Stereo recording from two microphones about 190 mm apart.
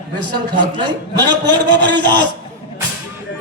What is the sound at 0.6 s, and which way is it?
A man's voice, 25° right (ahead or behind).